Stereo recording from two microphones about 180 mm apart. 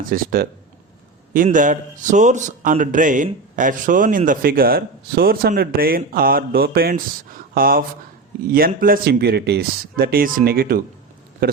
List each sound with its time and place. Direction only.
0.1 s speech: 55° right (ahead or behind)